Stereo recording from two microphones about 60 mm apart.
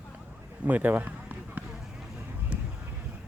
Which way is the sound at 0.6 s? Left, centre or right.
Right.